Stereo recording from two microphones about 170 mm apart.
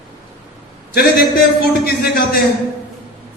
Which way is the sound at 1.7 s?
65° left (ahead or behind).